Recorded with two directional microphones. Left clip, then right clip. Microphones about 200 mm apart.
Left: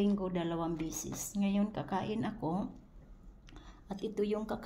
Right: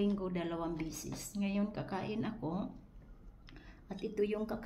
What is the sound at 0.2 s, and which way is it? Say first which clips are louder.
Speech: left 3 dB; 35° left (ahead or behind).